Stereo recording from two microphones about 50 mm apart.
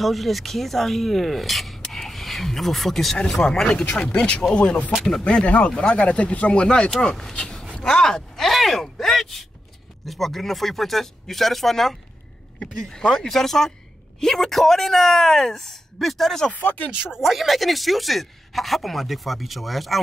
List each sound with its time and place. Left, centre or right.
0.0 s speech: centre
1.8 s a sound: centre
3.2 s speech: centre
7.5 s a sound: centre
10.0 s speech: centre
16.5 s speech: left
17.2 s speech: centre